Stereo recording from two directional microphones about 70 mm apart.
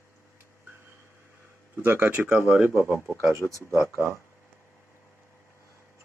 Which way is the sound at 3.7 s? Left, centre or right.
Right.